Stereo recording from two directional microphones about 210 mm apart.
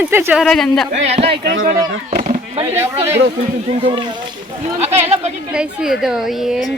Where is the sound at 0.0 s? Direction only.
10° right (ahead or behind).